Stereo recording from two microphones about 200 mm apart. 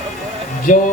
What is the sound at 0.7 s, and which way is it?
Speech, 40° left (ahead or behind).